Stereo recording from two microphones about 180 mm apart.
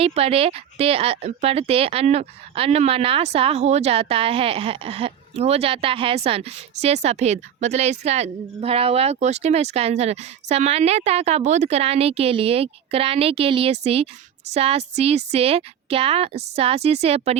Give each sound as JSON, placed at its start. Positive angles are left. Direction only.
{"t": 0.0, "sound": "speech", "side_deg": -35}